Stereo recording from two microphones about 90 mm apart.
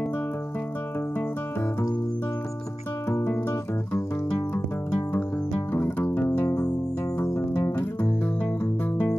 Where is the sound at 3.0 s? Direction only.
30° left (ahead or behind).